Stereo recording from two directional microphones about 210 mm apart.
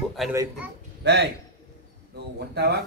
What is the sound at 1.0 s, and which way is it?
Speech, 55° right (ahead or behind).